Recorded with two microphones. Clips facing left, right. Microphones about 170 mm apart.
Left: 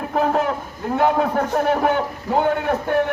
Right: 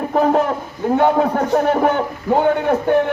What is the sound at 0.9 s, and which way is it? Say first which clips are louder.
Speech: right 3 dB; 40° right (ahead or behind).